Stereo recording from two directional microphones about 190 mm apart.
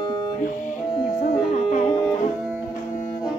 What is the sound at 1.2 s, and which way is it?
Music, 45° left (ahead or behind).